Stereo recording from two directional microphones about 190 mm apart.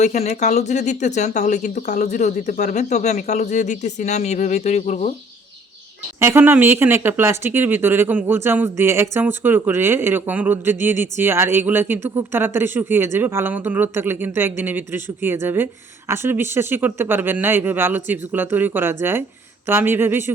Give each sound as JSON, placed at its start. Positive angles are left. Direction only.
{"t": 0.0, "sound": "speech", "side_deg": 35}
{"t": 6.1, "sound": "speech", "side_deg": -15}